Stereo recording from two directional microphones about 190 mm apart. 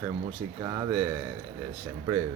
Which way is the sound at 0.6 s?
20° right (ahead or behind).